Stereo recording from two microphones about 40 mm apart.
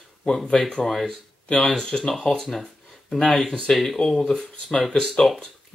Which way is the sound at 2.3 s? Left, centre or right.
Centre.